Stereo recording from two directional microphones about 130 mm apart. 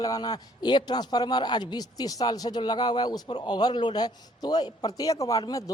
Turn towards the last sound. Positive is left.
turn(degrees=25)  # may be behind; listen again after turning